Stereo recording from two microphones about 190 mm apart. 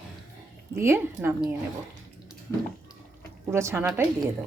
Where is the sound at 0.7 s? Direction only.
15° right (ahead or behind).